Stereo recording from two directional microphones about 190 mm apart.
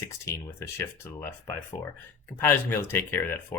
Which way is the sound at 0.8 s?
15° left (ahead or behind).